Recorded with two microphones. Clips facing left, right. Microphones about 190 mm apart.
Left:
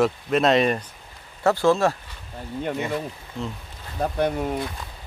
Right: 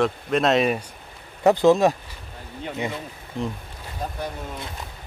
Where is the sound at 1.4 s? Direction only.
20° right (ahead or behind).